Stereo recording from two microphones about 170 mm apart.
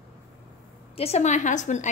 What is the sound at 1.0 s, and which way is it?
Speech, 40° left (ahead or behind).